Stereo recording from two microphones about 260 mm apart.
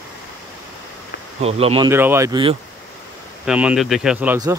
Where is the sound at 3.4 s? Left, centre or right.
Centre.